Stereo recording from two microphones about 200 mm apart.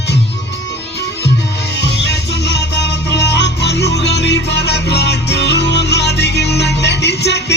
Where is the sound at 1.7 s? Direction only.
60° left (ahead or behind).